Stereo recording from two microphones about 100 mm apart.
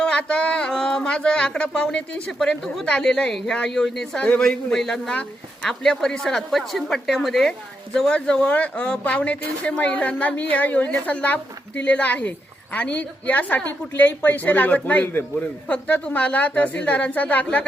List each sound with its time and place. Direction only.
0.0 s a woman's voice: 10° left (ahead or behind)